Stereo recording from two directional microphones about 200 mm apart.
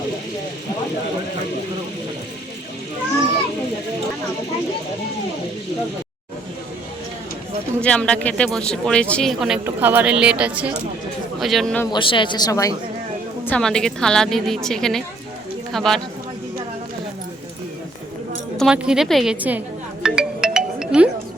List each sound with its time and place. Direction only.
7.8 s speech: 5° left (ahead or behind)
11.9 s a woman's voice: 25° left (ahead or behind)
13.4 s speech: 5° left (ahead or behind)
18.5 s music: centre (ahead or behind)